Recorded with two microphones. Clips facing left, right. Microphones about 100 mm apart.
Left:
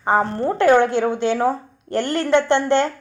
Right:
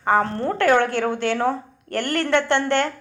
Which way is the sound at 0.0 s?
20° left (ahead or behind).